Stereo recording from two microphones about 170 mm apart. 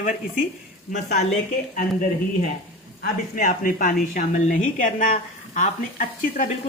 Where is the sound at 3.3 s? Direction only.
55° left (ahead or behind).